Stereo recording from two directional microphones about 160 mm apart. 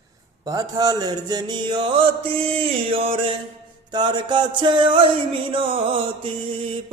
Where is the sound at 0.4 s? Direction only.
25° right (ahead or behind).